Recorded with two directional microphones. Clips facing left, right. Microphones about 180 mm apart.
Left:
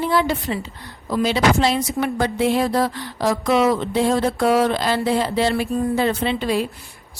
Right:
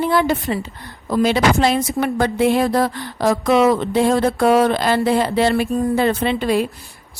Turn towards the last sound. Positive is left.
turn(degrees=-55)  # may be behind; listen again after turning